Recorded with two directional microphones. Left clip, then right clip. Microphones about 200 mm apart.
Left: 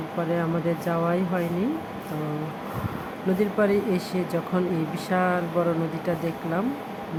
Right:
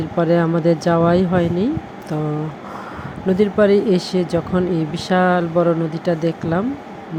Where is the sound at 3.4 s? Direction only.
20° right (ahead or behind).